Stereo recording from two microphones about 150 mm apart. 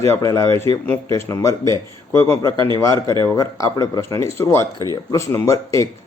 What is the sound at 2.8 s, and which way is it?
A man's voice, 20° left (ahead or behind).